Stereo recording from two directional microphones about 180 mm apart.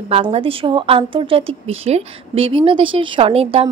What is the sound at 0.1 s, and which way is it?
A woman's voice, 30° right (ahead or behind).